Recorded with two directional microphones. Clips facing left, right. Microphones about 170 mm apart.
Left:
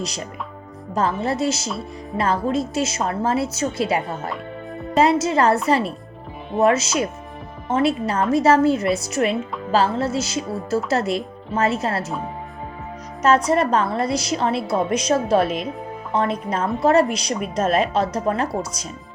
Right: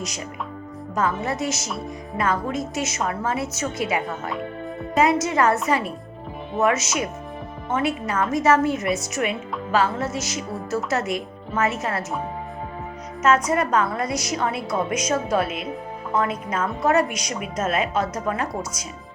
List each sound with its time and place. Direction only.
0.9 s a woman's voice: 30° left (ahead or behind)
13.2 s a woman's voice: 35° left (ahead or behind)